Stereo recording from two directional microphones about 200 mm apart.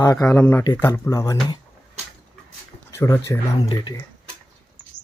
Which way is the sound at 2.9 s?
15° left (ahead or behind).